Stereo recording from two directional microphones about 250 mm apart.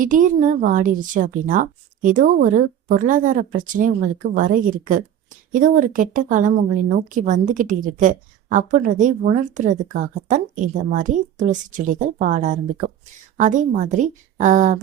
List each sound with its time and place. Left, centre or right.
0.0 s a woman's voice: right